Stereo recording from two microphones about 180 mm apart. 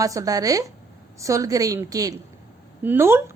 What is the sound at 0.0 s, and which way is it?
A woman's voice, 20° right (ahead or behind).